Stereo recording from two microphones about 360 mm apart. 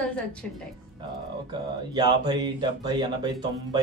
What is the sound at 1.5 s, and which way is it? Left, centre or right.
Speech, centre.